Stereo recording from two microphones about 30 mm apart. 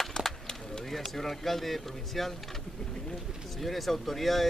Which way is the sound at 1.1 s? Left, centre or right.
Centre.